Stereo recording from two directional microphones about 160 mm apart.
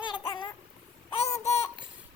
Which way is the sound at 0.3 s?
30° left (ahead or behind).